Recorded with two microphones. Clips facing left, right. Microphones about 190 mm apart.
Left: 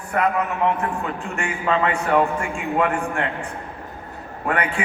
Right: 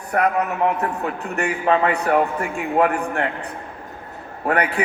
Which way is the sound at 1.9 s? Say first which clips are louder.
Right 2 dB; 35° right (ahead or behind).